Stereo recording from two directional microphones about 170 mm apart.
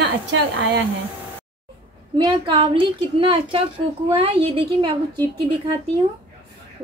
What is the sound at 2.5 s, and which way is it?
A woman's voice, 30° right (ahead or behind).